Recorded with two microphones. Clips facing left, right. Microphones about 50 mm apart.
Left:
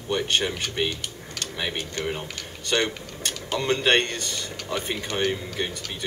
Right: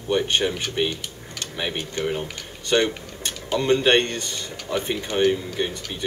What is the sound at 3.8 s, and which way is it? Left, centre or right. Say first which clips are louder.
Speech: right 2 dB; centre.